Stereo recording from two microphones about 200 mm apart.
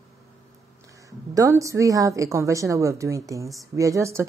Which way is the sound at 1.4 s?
15° right (ahead or behind).